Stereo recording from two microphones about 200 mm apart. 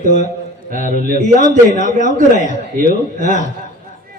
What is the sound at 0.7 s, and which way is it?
Speech, 40° right (ahead or behind).